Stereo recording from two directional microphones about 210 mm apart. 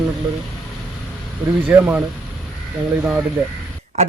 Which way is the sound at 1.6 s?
10° right (ahead or behind).